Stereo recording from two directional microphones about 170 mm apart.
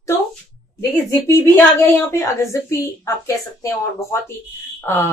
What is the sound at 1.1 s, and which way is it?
Speech, 15° left (ahead or behind).